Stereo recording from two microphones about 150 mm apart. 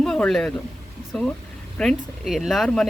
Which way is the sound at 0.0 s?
5° left (ahead or behind).